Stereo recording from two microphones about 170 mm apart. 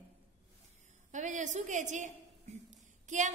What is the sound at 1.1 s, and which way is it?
Speech, 45° right (ahead or behind).